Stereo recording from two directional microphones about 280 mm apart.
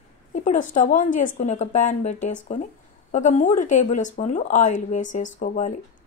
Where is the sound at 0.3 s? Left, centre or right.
Left.